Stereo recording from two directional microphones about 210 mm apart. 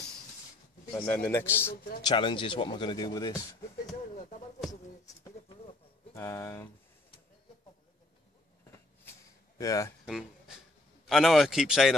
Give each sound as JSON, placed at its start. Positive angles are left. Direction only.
{"t": 1.0, "sound": "a man's voice", "side_deg": 10}
{"t": 2.0, "sound": "speech", "side_deg": 25}
{"t": 6.1, "sound": "a man's voice", "side_deg": 15}
{"t": 9.6, "sound": "speech", "side_deg": 15}
{"t": 10.0, "sound": "a man's voice", "side_deg": 0}